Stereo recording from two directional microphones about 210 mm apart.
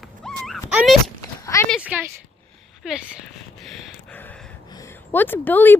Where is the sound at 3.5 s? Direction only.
5° left (ahead or behind).